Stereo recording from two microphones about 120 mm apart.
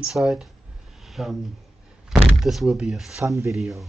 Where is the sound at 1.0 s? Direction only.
Centre (ahead or behind).